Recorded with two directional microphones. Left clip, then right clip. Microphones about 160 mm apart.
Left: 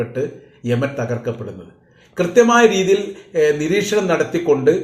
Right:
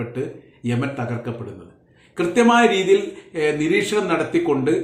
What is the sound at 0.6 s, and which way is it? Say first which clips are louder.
Speech: left 5 dB; 15° right (ahead or behind).